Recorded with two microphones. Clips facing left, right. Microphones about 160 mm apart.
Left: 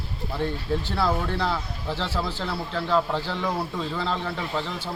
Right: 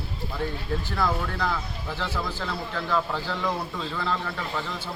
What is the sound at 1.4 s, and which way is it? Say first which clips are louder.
Speech: left 2 dB; 20° left (ahead or behind).